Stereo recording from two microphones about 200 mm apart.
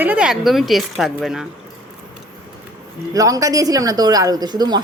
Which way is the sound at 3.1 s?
15° right (ahead or behind).